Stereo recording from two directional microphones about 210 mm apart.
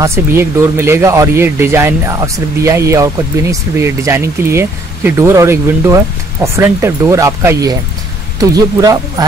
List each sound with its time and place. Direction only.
0.0 s speech: 10° right (ahead or behind)